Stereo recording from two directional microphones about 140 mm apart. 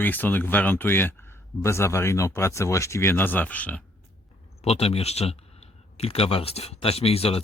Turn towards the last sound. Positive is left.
turn(degrees=45)  # may be behind; listen again after turning